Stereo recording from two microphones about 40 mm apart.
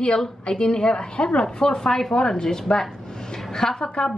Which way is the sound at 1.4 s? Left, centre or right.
Centre.